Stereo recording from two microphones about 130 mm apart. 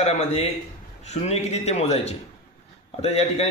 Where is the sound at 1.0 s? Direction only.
60° left (ahead or behind).